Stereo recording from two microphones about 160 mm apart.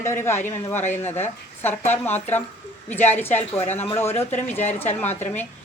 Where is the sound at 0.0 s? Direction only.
15° left (ahead or behind).